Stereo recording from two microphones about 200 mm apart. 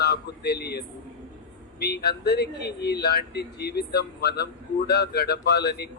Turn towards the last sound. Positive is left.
turn(degrees=55)  # may be behind; listen again after turning